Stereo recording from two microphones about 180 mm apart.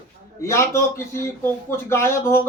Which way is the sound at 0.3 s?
15° left (ahead or behind).